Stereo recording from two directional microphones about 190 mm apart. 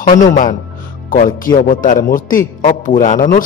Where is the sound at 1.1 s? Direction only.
45° left (ahead or behind).